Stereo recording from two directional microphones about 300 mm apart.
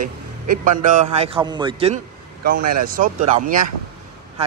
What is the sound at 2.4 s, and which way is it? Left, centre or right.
Speech, right.